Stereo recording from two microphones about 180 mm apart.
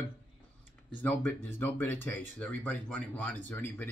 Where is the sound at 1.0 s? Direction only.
10° left (ahead or behind).